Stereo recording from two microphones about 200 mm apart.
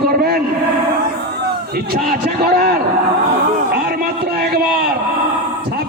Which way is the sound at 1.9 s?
50° right (ahead or behind).